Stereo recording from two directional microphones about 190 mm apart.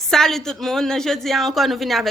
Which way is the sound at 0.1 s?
Centre (ahead or behind).